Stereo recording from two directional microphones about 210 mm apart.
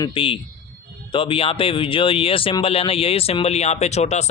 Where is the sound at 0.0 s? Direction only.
25° left (ahead or behind).